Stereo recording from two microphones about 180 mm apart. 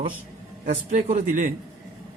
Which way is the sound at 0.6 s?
45° right (ahead or behind).